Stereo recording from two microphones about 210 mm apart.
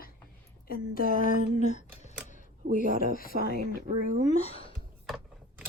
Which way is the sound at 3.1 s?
45° left (ahead or behind).